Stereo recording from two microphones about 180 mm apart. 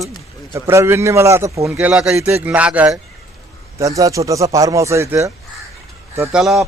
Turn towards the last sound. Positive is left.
turn(degrees=0)  # may be behind; listen again after turning